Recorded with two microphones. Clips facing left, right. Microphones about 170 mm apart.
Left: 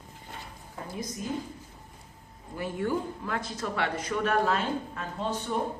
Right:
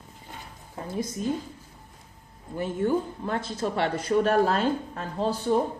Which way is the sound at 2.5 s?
25° right (ahead or behind).